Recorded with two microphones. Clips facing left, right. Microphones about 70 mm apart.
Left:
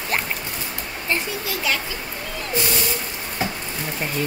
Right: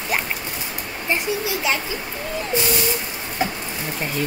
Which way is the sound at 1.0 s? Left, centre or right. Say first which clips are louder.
Right 3 dB; centre.